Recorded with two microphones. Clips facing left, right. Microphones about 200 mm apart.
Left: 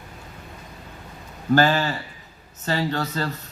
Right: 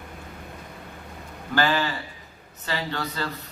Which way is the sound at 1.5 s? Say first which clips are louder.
Left 4 dB; 45° left (ahead or behind).